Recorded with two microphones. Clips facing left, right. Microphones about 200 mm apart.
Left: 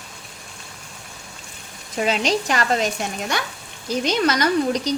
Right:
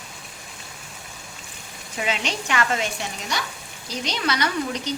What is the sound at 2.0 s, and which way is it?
Speech, 40° left (ahead or behind).